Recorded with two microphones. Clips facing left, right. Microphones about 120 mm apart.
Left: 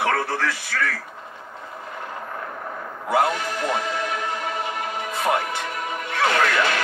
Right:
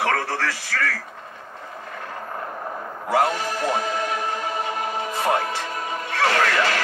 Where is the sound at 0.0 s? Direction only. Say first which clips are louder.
Left 1 dB; 30° left (ahead or behind).